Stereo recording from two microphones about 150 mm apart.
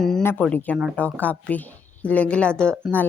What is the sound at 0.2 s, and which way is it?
A woman's voice, 15° left (ahead or behind).